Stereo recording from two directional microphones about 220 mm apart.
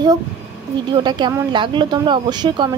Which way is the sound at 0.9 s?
20° right (ahead or behind).